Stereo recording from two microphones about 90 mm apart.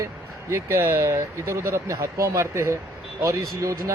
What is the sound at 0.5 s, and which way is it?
Speech, 35° right (ahead or behind).